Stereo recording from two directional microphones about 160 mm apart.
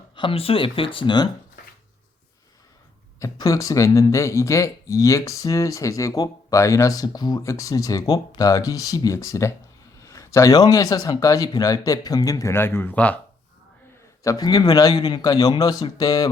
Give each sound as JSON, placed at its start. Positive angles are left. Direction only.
{"t": 0.2, "sound": "speech", "side_deg": 35}
{"t": 3.2, "sound": "speech", "side_deg": 20}
{"t": 14.3, "sound": "speech", "side_deg": 25}